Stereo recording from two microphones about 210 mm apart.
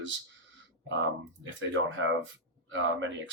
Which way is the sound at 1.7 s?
65° right (ahead or behind).